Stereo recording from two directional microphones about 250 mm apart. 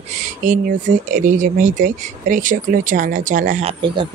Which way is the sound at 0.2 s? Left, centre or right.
Right.